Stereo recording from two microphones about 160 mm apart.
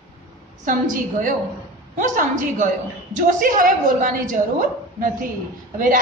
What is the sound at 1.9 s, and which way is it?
A woman's voice, 55° right (ahead or behind).